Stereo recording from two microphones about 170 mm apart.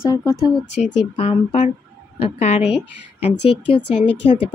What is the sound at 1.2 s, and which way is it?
A woman's voice, 35° left (ahead or behind).